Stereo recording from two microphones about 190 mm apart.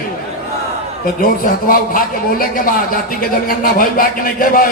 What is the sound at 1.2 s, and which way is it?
A man's voice, 50° left (ahead or behind).